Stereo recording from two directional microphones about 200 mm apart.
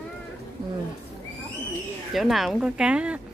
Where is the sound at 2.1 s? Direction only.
Centre (ahead or behind).